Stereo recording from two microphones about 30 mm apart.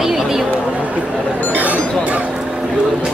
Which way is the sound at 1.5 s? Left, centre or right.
Right.